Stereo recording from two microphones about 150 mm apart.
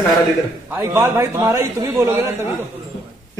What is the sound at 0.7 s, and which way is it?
A man's voice, 15° right (ahead or behind).